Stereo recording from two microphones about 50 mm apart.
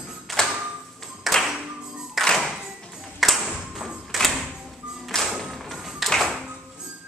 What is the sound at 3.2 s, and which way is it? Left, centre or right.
Clapping, centre.